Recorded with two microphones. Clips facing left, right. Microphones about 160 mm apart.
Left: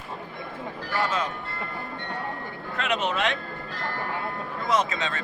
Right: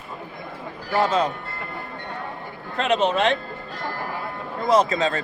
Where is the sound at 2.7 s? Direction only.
30° right (ahead or behind).